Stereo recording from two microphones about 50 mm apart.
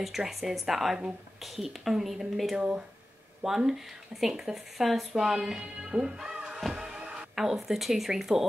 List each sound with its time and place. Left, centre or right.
0.2 s speech: centre
6.6 s music: centre
7.0 s music: right
7.3 s speech: centre